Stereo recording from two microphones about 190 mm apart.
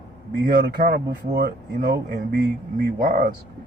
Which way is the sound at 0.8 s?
50° right (ahead or behind).